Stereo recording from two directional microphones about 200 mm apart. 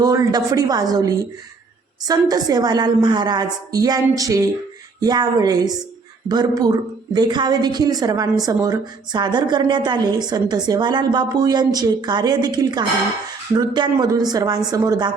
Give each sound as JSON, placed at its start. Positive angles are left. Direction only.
{"t": 0.0, "sound": "a woman's voice", "side_deg": -20}